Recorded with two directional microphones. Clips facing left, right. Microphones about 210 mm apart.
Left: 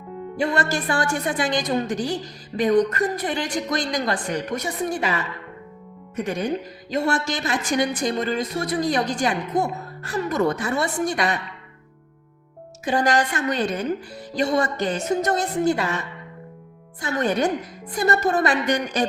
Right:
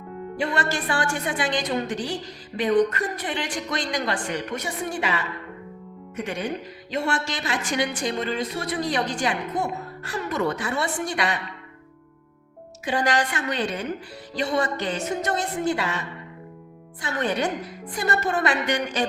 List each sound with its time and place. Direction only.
0.3 s a woman's voice: 40° left (ahead or behind)
6.2 s a woman's voice: 40° left (ahead or behind)
12.8 s speech: 40° left (ahead or behind)
17.0 s a woman's voice: 40° left (ahead or behind)